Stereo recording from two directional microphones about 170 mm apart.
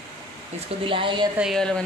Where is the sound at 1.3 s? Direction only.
Centre (ahead or behind).